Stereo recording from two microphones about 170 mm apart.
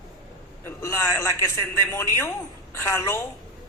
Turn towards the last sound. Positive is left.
turn(degrees=15)  # may be behind; listen again after turning